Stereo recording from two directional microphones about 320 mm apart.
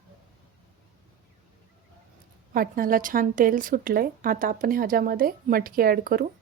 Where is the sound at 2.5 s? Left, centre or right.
Right.